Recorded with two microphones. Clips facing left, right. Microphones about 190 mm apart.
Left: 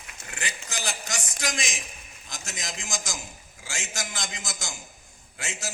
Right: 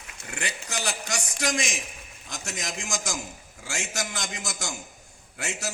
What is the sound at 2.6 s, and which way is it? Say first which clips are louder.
Speech: right 3 dB; 65° right (ahead or behind).